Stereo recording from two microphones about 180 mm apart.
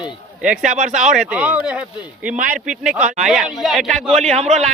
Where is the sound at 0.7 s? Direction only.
45° right (ahead or behind).